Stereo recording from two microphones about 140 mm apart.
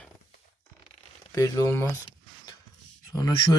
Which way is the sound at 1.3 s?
20° left (ahead or behind).